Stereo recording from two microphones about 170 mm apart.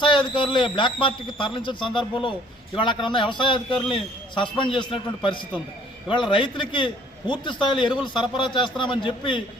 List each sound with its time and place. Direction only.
0.0 s a man's voice: 30° left (ahead or behind)